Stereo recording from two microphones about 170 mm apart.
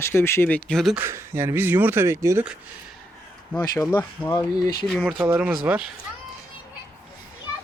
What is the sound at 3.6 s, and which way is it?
Speech, 20° left (ahead or behind).